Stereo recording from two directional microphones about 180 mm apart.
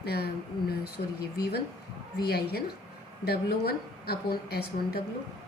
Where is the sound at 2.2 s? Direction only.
60° left (ahead or behind).